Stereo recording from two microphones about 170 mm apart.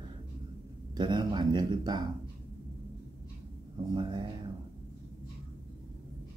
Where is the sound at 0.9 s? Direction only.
25° right (ahead or behind).